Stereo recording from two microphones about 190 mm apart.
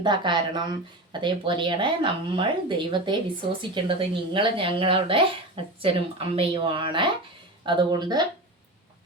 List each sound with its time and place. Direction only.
0.0 s a woman's voice: 25° right (ahead or behind)